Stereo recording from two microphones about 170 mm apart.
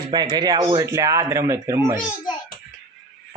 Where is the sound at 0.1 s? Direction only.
25° right (ahead or behind).